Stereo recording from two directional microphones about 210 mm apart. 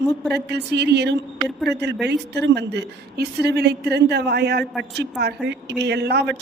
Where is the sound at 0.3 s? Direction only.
50° right (ahead or behind).